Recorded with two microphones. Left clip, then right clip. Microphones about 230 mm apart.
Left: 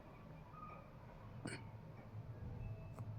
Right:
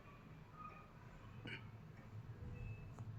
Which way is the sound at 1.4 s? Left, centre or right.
Centre.